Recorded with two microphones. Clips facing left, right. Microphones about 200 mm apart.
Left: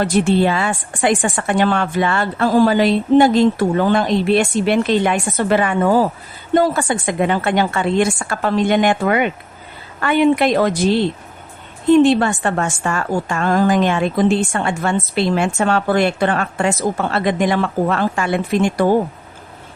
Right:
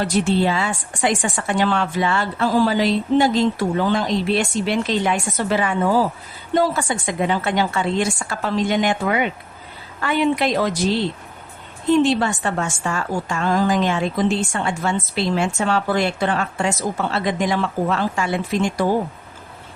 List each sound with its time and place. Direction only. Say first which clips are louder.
0.0 s a woman's voice: left 4 dB; 55° left (ahead or behind)